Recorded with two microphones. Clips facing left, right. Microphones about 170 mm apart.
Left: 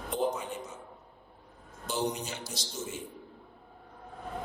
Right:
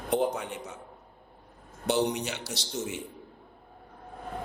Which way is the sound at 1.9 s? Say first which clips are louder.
Right 6 dB; 70° right (ahead or behind).